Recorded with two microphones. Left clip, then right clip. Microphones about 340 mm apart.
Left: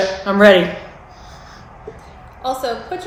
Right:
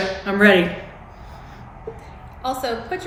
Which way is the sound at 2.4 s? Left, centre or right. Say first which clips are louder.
Left 3 dB; centre.